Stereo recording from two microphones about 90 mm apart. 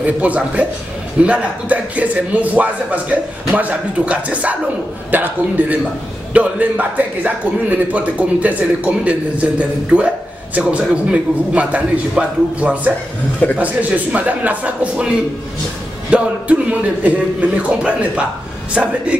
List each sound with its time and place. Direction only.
0.0 s a man's voice: 15° right (ahead or behind)
16.1 s a man's voice: 15° right (ahead or behind)